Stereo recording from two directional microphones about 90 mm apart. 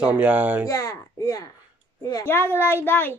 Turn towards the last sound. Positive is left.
turn(degrees=25)  # may be behind; listen again after turning